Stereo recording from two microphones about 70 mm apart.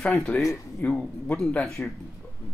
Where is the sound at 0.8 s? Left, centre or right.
Left.